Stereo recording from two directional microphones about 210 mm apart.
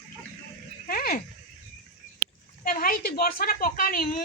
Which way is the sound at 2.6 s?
40° left (ahead or behind).